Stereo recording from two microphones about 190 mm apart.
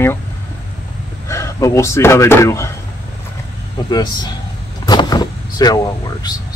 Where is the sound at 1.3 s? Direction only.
15° left (ahead or behind).